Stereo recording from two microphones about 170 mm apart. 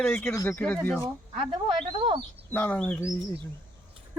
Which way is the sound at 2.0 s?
30° right (ahead or behind).